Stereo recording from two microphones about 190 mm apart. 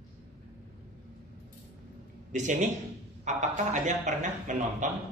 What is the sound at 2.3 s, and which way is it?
Speech, 40° right (ahead or behind).